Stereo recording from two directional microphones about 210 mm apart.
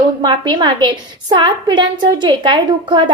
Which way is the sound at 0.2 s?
20° right (ahead or behind).